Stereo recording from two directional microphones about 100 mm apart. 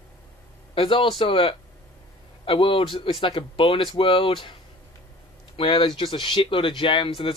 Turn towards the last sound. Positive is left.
turn(degrees=60)  # may be behind; listen again after turning